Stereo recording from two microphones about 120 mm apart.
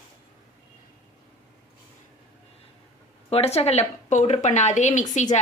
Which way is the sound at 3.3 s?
60° left (ahead or behind).